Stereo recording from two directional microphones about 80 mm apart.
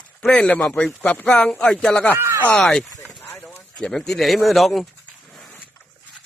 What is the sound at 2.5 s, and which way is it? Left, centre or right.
Speech, centre.